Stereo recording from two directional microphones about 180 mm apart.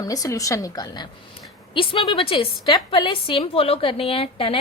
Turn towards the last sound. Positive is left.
turn(degrees=30)  # may be behind; listen again after turning